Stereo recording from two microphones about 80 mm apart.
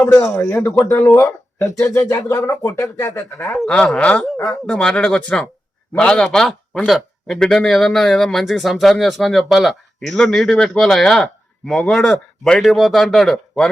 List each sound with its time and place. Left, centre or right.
0.0 s speech: left
1.1 s speech: left
3.7 s a man's voice: centre